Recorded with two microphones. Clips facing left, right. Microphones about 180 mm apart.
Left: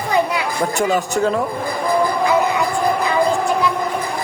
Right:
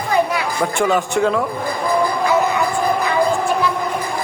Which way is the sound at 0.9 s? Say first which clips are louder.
Right 1 dB; 40° left (ahead or behind).